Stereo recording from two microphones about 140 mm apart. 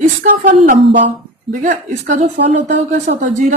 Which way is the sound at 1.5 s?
65° right (ahead or behind).